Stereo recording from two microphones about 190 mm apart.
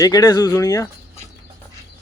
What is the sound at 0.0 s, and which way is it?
Speech, 20° left (ahead or behind).